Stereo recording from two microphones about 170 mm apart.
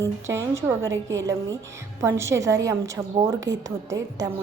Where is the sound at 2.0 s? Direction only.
15° right (ahead or behind).